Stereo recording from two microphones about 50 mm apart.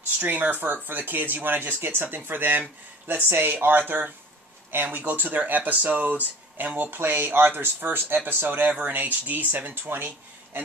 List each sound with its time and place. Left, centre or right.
0.2 s speech: right
7.0 s speech: right